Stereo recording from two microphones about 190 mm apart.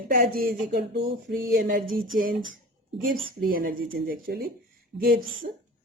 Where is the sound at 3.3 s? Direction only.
50° right (ahead or behind).